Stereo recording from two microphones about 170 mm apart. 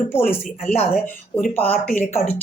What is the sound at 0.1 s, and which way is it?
Speech, 15° left (ahead or behind).